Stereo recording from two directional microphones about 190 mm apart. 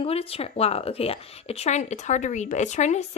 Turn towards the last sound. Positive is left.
turn(degrees=35)  # may be behind; listen again after turning